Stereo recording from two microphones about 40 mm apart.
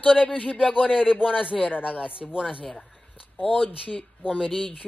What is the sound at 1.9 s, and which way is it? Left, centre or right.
Speech, right.